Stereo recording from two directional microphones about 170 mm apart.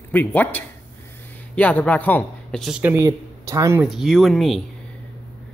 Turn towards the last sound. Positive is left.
turn(degrees=0)  # may be behind; listen again after turning